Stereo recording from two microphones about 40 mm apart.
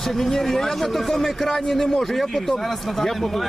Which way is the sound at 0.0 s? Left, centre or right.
Centre.